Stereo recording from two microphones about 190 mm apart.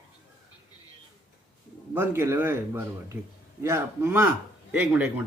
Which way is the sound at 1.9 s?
10° right (ahead or behind).